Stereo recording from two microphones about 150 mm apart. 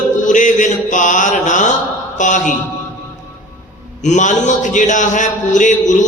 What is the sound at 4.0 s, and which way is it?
Mantra, 55° left (ahead or behind).